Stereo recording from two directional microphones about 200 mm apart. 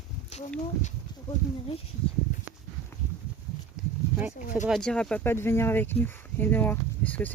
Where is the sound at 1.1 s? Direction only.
20° left (ahead or behind).